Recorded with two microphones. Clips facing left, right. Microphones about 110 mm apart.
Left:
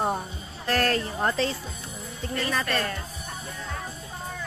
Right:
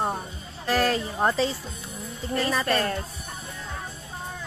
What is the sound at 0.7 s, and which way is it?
Speech, 5° right (ahead or behind).